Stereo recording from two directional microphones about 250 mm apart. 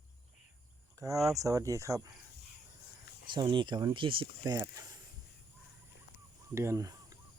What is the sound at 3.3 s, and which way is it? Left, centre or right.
Speech, centre.